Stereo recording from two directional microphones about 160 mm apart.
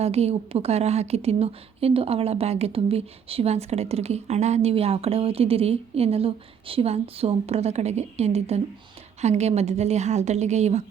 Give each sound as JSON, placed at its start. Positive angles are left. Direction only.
{"t": 0.0, "sound": "a woman's voice", "side_deg": -40}